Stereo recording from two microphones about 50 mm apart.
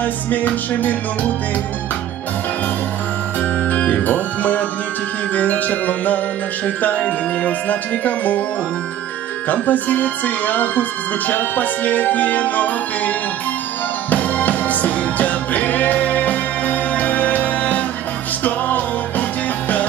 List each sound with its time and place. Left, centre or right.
0.0 s speech: left
3.3 s music: left
5.3 s speech: left
9.5 s speech: left
14.1 s music: left